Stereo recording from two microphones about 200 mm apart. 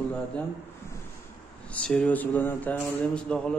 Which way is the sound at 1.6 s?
5° left (ahead or behind).